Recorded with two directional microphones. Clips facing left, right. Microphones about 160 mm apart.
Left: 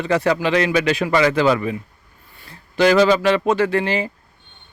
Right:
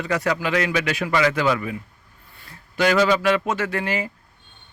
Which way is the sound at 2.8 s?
30° left (ahead or behind).